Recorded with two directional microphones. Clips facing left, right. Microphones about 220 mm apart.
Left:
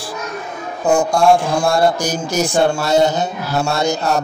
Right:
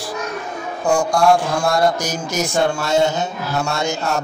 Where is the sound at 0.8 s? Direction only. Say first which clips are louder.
Left 2 dB; 25° left (ahead or behind).